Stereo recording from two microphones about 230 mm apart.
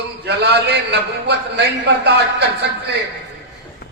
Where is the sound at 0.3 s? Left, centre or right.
Right.